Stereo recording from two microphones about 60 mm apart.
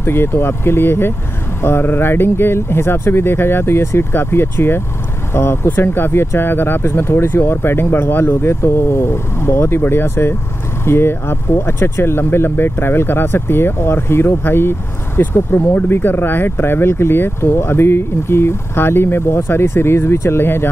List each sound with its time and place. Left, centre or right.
0.0 s speech: left